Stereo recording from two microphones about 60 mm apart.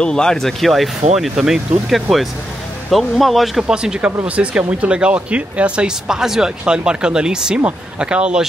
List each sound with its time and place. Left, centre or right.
0.0 s speech: centre
3.6 s speech: centre